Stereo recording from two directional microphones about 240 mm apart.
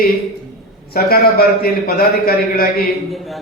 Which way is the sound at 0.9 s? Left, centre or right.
Left.